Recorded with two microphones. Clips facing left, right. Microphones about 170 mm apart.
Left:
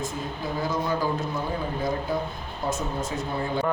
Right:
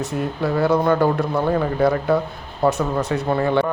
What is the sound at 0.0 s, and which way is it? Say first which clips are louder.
Speech: right 8 dB; 70° right (ahead or behind).